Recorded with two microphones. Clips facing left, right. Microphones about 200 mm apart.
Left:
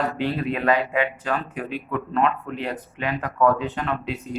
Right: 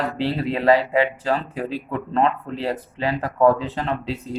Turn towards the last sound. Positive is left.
turn(degrees=-30)  # may be behind; listen again after turning